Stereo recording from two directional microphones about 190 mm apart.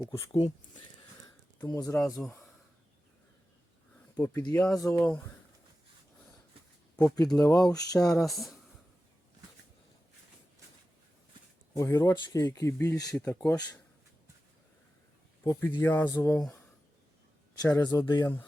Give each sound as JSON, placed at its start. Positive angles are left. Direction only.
{"t": 0.3, "sound": "speech", "side_deg": 30}
{"t": 1.6, "sound": "a sound", "side_deg": 20}
{"t": 4.4, "sound": "a sound", "side_deg": 20}
{"t": 4.6, "sound": "speech", "side_deg": 0}
{"t": 6.9, "sound": "speech", "side_deg": 15}
{"t": 7.3, "sound": "a sound", "side_deg": 20}
{"t": 8.2, "sound": "speech", "side_deg": 0}
{"t": 11.7, "sound": "speech", "side_deg": 15}
{"t": 15.4, "sound": "speech", "side_deg": 15}
{"t": 17.6, "sound": "speech", "side_deg": 15}